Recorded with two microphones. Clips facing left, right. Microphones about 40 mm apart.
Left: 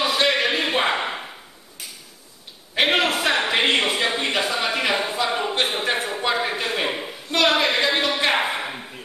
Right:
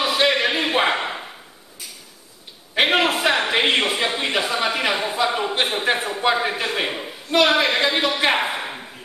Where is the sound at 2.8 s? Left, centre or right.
Centre.